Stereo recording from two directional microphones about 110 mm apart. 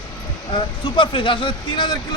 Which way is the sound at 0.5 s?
45° left (ahead or behind).